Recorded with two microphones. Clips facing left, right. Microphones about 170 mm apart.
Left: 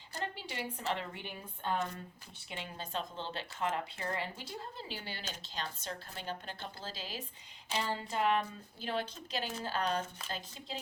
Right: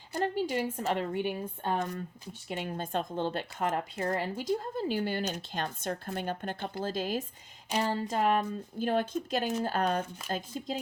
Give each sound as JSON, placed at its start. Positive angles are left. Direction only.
{"t": 0.1, "sound": "speech", "side_deg": -50}